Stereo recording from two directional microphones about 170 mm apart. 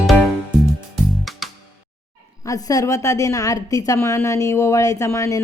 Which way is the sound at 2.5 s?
20° left (ahead or behind).